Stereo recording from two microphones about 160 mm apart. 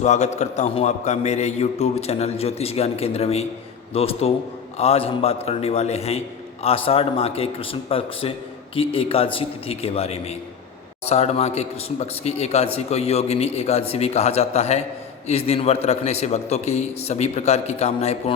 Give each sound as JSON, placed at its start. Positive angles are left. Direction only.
{"t": 0.0, "sound": "a man's voice", "side_deg": 45}